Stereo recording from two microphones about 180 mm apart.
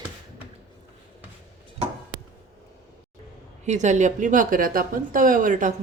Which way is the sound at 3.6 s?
40° right (ahead or behind).